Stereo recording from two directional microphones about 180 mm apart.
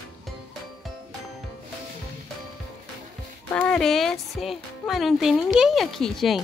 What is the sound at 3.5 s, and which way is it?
Speech, 5° left (ahead or behind).